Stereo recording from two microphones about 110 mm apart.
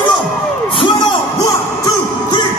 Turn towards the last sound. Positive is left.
turn(degrees=45)  # may be behind; listen again after turning